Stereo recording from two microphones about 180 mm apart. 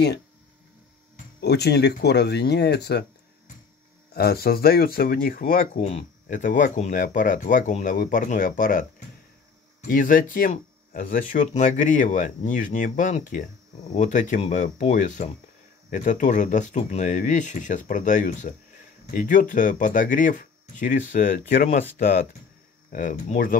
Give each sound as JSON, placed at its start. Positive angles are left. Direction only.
{"t": 1.4, "sound": "speech", "side_deg": 65}
{"t": 4.1, "sound": "speech", "side_deg": 60}
{"t": 5.8, "sound": "speech", "side_deg": 35}
{"t": 9.8, "sound": "speech", "side_deg": 50}
{"t": 22.9, "sound": "speech", "side_deg": 50}